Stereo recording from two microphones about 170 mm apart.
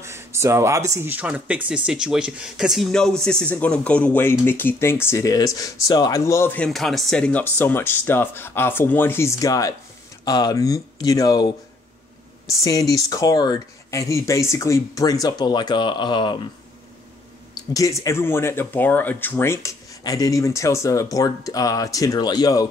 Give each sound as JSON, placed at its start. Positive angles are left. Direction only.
{"t": 0.0, "sound": "speech", "side_deg": -15}
{"t": 17.7, "sound": "speech", "side_deg": 20}